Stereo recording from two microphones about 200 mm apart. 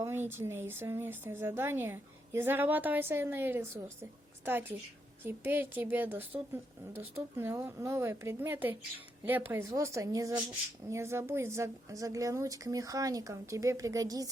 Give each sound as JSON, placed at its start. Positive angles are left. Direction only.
{"t": 0.0, "sound": "a woman's voice", "side_deg": -10}
{"t": 5.2, "sound": "a woman's voice", "side_deg": -10}